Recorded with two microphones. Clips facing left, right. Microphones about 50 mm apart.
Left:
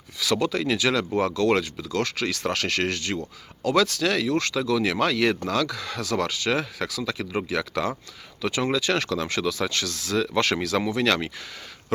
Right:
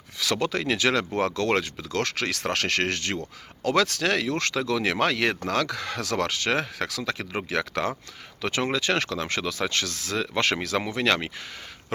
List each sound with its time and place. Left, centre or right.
0.2 s speech: right